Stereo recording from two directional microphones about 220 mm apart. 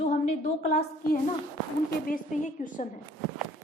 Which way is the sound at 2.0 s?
35° left (ahead or behind).